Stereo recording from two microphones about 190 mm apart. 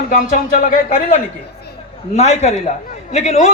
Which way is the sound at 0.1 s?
40° left (ahead or behind).